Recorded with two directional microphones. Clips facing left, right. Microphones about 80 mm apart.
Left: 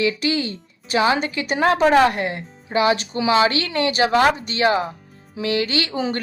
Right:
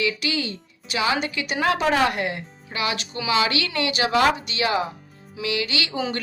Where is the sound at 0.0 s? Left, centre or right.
Left.